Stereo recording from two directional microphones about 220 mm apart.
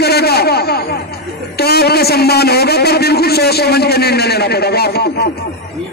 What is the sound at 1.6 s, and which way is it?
A man's voice, 45° left (ahead or behind).